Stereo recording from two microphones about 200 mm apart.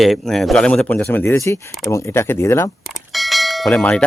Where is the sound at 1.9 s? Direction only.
15° left (ahead or behind).